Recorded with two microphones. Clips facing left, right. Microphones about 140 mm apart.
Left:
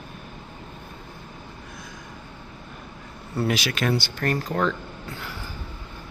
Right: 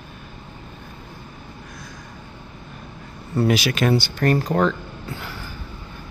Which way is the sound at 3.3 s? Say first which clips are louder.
Right 5 dB; 10° right (ahead or behind).